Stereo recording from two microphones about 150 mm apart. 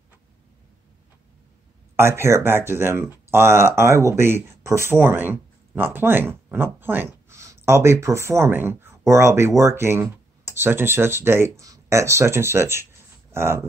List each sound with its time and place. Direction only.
2.0 s speech: 15° right (ahead or behind)